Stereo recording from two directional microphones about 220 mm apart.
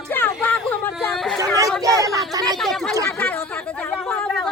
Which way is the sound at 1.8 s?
15° right (ahead or behind).